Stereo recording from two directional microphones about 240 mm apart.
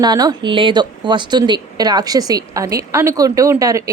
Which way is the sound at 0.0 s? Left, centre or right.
Centre.